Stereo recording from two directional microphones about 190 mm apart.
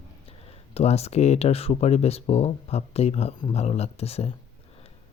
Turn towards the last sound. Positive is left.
turn(degrees=30)  # may be behind; listen again after turning